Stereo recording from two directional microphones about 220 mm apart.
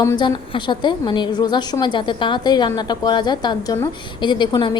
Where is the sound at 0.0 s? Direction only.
15° left (ahead or behind).